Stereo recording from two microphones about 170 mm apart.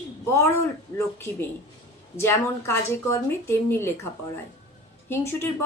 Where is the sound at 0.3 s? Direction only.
15° left (ahead or behind).